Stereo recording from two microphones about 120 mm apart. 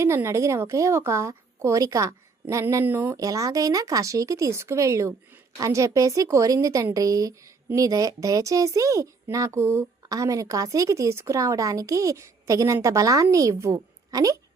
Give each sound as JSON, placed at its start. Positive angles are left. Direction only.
{"t": 0.0, "sound": "speech", "side_deg": -25}
{"t": 3.2, "sound": "speech", "side_deg": -30}